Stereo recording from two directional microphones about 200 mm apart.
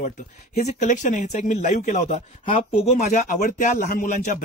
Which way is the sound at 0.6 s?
35° left (ahead or behind).